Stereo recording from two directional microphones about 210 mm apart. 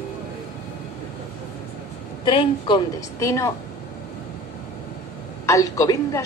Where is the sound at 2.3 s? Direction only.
25° left (ahead or behind).